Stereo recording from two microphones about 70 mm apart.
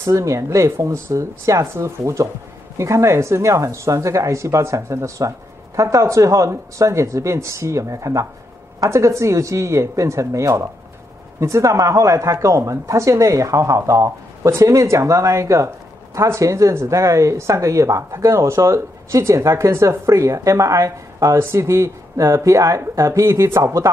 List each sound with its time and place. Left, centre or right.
0.0 s speech: right